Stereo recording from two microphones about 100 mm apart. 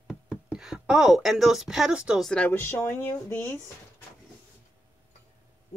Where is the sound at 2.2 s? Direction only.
10° left (ahead or behind).